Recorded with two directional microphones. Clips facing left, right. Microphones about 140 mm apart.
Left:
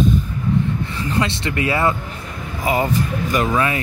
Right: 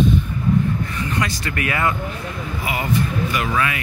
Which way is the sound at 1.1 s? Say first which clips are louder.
Left 6 dB; 30° left (ahead or behind).